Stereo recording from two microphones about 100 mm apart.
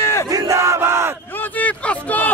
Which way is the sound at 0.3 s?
30° right (ahead or behind).